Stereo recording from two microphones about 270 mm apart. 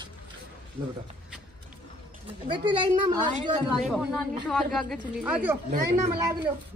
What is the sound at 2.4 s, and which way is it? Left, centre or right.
Speech, centre.